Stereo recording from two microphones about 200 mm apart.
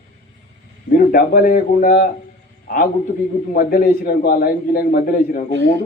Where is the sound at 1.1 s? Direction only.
45° left (ahead or behind).